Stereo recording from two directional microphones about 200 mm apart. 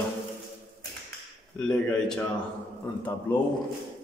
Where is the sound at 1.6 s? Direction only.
5° left (ahead or behind).